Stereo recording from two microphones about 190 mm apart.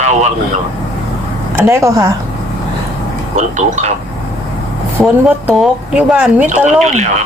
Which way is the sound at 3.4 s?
40° right (ahead or behind).